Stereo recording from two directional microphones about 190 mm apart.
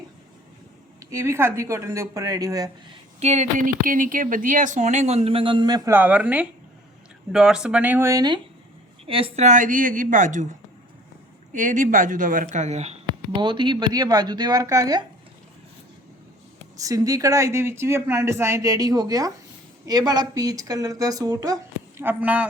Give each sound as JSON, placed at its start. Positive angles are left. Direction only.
{"t": 1.1, "sound": "speech", "side_deg": -15}
{"t": 3.2, "sound": "speech", "side_deg": -35}
{"t": 11.5, "sound": "speech", "side_deg": -45}
{"t": 13.4, "sound": "speech", "side_deg": -25}
{"t": 16.7, "sound": "speech", "side_deg": -15}